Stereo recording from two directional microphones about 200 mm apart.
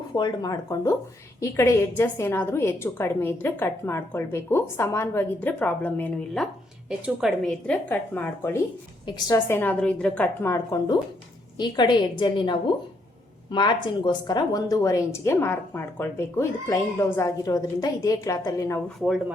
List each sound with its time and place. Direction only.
0.2 s a woman's voice: 15° left (ahead or behind)
18.9 s speech: centre (ahead or behind)